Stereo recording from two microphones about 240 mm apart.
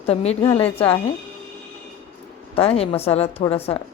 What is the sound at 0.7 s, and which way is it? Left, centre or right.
Speech, left.